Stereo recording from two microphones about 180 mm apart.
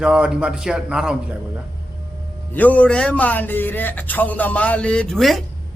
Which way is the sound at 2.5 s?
10° left (ahead or behind).